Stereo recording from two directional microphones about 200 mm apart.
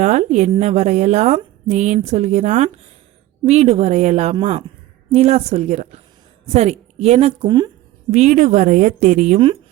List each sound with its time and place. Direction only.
0.0 s a woman's voice: 35° right (ahead or behind)
8.1 s a woman's voice: 35° right (ahead or behind)